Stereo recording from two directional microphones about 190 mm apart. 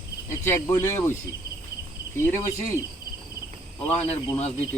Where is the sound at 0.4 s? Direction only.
15° left (ahead or behind).